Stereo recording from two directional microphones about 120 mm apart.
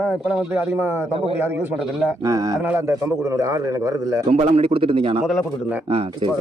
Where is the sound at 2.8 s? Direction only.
25° right (ahead or behind).